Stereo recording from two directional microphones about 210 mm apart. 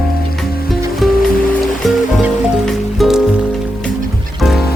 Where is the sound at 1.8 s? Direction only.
Centre (ahead or behind).